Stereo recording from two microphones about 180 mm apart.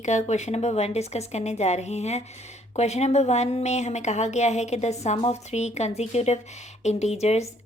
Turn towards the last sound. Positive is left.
turn(degrees=35)  # may be behind; listen again after turning